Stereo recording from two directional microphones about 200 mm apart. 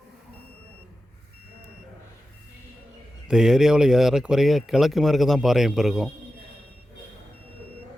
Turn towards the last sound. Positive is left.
turn(degrees=0)  # may be behind; listen again after turning